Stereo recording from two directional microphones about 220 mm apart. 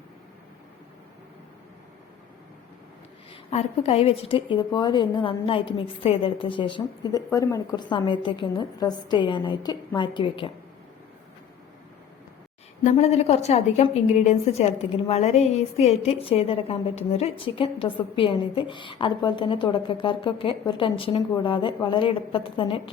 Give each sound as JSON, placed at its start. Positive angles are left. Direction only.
{"t": 3.5, "sound": "a woman's voice", "side_deg": 30}
{"t": 12.8, "sound": "a woman's voice", "side_deg": 30}